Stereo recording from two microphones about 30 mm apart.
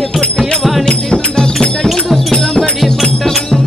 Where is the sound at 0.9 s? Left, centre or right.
Left.